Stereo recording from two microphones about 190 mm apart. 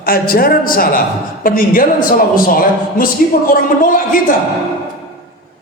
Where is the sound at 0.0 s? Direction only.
50° left (ahead or behind).